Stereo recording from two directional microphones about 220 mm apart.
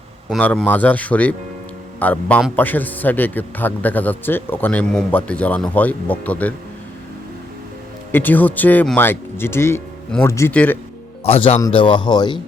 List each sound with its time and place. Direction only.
0.3 s a man's voice: 5° left (ahead or behind)
8.1 s a man's voice: 10° left (ahead or behind)
11.3 s a man's voice: 25° left (ahead or behind)